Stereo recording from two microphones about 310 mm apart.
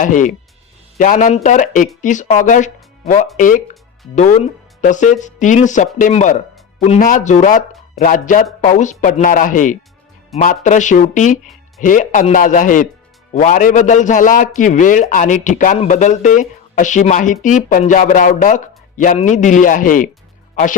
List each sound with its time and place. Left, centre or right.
0.0 s a man's voice: left